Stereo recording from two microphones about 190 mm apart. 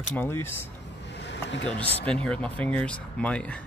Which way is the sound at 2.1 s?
5° left (ahead or behind).